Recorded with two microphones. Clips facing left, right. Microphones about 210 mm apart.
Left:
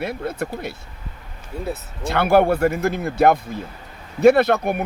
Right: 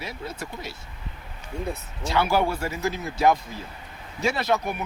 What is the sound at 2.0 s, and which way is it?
Speech, 60° left (ahead or behind).